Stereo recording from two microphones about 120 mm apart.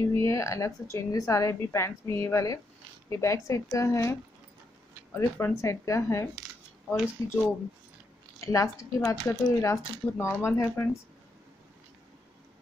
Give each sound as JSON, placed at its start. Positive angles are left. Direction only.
{"t": 0.1, "sound": "a woman's voice", "side_deg": 25}
{"t": 8.5, "sound": "a woman's voice", "side_deg": 25}